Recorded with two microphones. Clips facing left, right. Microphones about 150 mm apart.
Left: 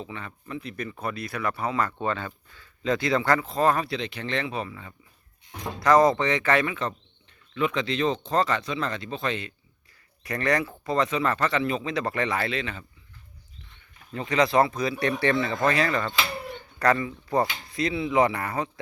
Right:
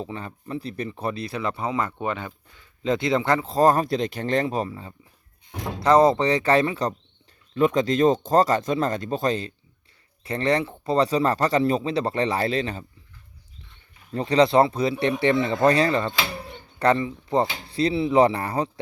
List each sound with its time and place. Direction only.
0.0 s speech: 35° right (ahead or behind)
3.5 s speech: 40° right (ahead or behind)
10.2 s speech: 25° right (ahead or behind)
14.1 s speech: 35° right (ahead or behind)
15.5 s speech: 35° right (ahead or behind)